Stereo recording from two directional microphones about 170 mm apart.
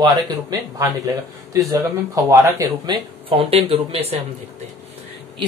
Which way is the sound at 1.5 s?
20° right (ahead or behind).